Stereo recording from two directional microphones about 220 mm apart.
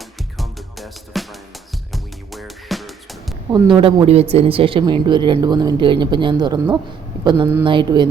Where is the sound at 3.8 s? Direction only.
25° right (ahead or behind).